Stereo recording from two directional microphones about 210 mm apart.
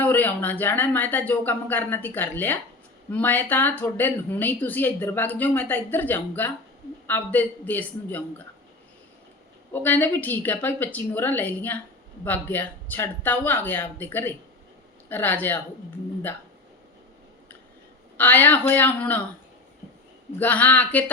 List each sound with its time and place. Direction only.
0.0 s speech: 10° left (ahead or behind)
9.7 s speech: 10° left (ahead or behind)
18.2 s speech: 10° left (ahead or behind)
20.4 s speech: 10° left (ahead or behind)